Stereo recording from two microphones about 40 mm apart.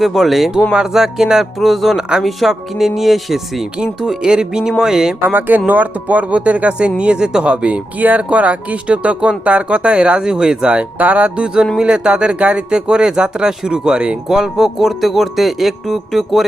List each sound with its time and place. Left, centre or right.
0.0 s speech: centre
4.2 s speech: centre
5.2 s speech: right
7.9 s speech: right
10.2 s speech: centre
10.9 s speech: right
11.4 s speech: right
12.7 s speech: right
14.3 s speech: centre